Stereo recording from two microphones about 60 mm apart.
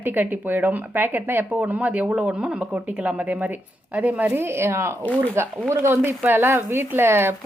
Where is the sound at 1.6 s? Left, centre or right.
Right.